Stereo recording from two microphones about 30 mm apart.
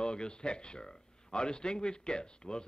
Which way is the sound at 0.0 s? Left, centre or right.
Left.